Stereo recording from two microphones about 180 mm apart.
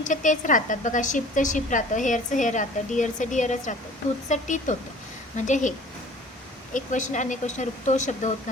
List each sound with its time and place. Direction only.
0.0 s a woman's voice: 45° left (ahead or behind)
6.7 s a woman's voice: 45° left (ahead or behind)